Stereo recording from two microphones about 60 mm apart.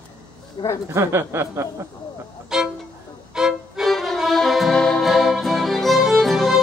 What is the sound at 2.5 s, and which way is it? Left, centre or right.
Music, centre.